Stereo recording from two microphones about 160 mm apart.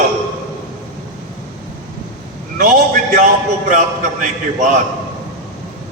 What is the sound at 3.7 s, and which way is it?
A man's voice, 55° right (ahead or behind).